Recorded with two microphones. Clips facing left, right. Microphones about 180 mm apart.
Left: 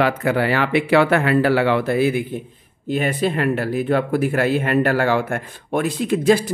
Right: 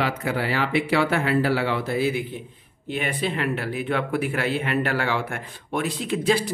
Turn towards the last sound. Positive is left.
turn(degrees=45)  # may be behind; listen again after turning